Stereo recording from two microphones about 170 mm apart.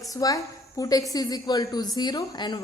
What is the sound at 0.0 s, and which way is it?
A woman's voice, 20° left (ahead or behind).